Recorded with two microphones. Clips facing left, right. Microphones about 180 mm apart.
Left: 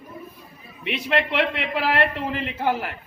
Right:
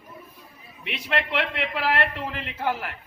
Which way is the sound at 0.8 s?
Centre (ahead or behind).